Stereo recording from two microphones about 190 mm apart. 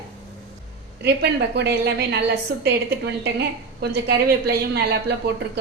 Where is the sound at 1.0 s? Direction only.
60° right (ahead or behind).